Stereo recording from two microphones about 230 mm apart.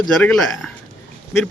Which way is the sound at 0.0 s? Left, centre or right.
Centre.